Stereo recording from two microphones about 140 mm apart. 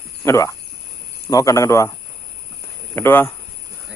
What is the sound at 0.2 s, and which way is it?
A man's voice, 20° left (ahead or behind).